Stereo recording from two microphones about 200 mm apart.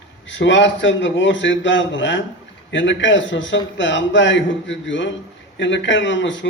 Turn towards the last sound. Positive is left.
turn(degrees=65)  # may be behind; listen again after turning